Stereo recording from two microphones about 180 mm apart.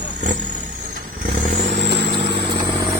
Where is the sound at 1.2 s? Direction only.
45° right (ahead or behind).